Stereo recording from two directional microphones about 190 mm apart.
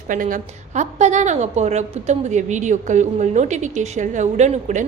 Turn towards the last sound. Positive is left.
turn(degrees=-40)  # may be behind; listen again after turning